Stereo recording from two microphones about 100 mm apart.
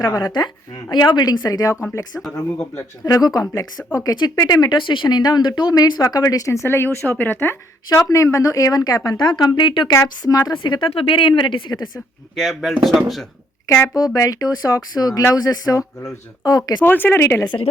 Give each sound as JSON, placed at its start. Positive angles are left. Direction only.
{"t": 0.0, "sound": "speech", "side_deg": 40}
{"t": 9.9, "sound": "speech", "side_deg": 35}
{"t": 10.6, "sound": "speech", "side_deg": 55}
{"t": 12.4, "sound": "speech", "side_deg": 0}
{"t": 13.8, "sound": "speech", "side_deg": 40}
{"t": 16.8, "sound": "speech", "side_deg": 20}